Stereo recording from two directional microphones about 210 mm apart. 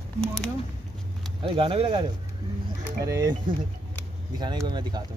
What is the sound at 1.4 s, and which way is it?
Speech, 25° right (ahead or behind).